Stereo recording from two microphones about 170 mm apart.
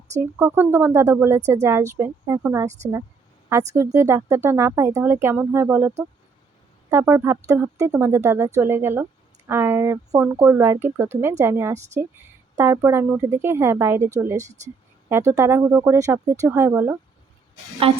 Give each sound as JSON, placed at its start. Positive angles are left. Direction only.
{"t": 0.2, "sound": "speech", "side_deg": -15}
{"t": 2.6, "sound": "speech", "side_deg": -40}
{"t": 3.9, "sound": "speech", "side_deg": -15}
{"t": 6.9, "sound": "speech", "side_deg": -15}
{"t": 17.8, "sound": "speech", "side_deg": -35}